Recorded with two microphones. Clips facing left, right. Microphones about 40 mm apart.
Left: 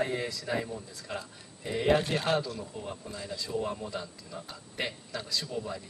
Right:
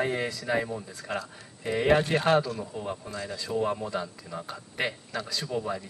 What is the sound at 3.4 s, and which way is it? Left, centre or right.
Speech, right.